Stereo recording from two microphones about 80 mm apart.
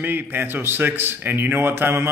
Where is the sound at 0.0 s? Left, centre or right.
Right.